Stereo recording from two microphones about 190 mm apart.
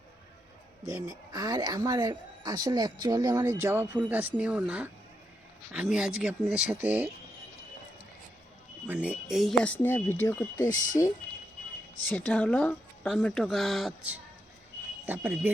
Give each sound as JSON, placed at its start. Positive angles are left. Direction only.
{"t": 0.9, "sound": "a woman's voice", "side_deg": -15}
{"t": 8.9, "sound": "speech", "side_deg": -5}
{"t": 12.1, "sound": "speech", "side_deg": 10}